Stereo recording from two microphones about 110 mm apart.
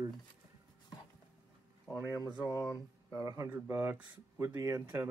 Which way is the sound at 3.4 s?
15° right (ahead or behind).